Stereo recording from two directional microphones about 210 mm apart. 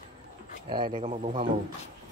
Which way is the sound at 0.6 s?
20° right (ahead or behind).